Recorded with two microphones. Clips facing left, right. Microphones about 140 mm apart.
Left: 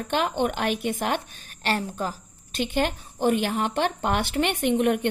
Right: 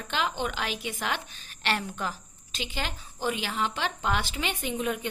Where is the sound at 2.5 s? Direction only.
55° left (ahead or behind).